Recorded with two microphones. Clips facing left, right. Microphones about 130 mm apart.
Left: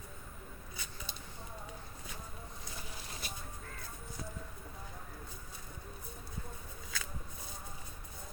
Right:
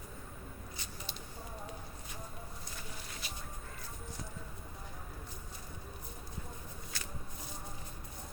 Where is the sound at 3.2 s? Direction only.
50° left (ahead or behind).